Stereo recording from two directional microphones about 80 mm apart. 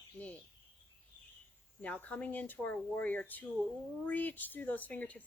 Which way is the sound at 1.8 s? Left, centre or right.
Centre.